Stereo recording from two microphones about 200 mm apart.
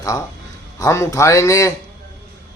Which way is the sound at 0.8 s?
15° left (ahead or behind).